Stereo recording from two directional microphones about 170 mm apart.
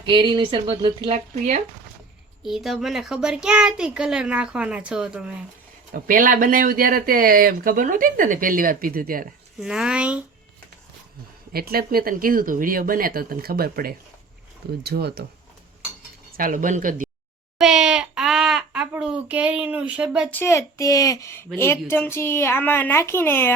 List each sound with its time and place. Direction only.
0.0 s speech: 30° right (ahead or behind)
2.4 s a child's voice: centre (ahead or behind)
5.9 s speech: 55° right (ahead or behind)
9.6 s a child's voice: 5° right (ahead or behind)
11.5 s speech: 65° right (ahead or behind)
16.3 s speech: 55° right (ahead or behind)
17.6 s baby cry: centre (ahead or behind)
20.3 s a woman's voice: 15° left (ahead or behind)